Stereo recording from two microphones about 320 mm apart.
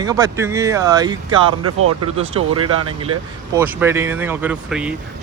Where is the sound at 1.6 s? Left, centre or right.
Right.